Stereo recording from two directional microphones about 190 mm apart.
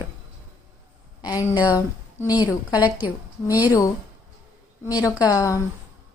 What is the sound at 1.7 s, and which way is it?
A woman's voice, 20° left (ahead or behind).